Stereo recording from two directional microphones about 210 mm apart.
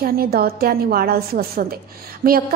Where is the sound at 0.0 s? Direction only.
45° right (ahead or behind).